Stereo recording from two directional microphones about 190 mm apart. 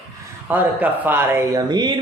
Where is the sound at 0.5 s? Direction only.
10° right (ahead or behind).